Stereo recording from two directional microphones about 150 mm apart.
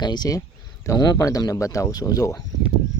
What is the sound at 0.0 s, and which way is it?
Speech, 30° left (ahead or behind).